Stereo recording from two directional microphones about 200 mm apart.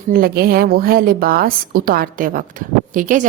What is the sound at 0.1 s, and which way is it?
Speech, 45° right (ahead or behind).